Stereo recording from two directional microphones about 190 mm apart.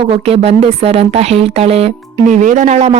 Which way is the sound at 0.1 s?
30° right (ahead or behind).